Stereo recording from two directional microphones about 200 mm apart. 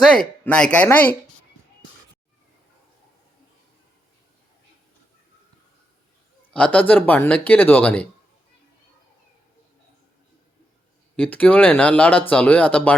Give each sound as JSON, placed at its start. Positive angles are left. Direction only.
{"t": 0.0, "sound": "speech", "side_deg": 5}
{"t": 6.5, "sound": "speech", "side_deg": 5}
{"t": 11.2, "sound": "speech", "side_deg": 5}